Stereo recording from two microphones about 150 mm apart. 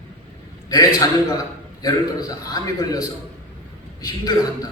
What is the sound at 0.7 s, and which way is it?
Speech, 25° left (ahead or behind).